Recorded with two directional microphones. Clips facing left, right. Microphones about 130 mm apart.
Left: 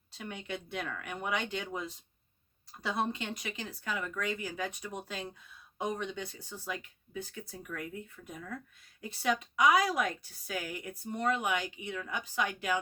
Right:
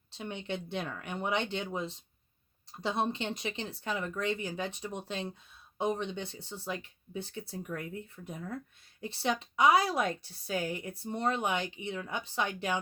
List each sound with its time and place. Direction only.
0.1 s a woman's voice: 25° right (ahead or behind)